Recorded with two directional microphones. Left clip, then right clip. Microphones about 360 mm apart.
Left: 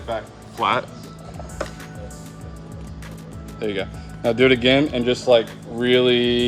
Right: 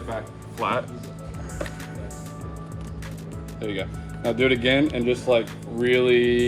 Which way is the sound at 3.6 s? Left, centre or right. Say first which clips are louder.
Left 5 dB; left.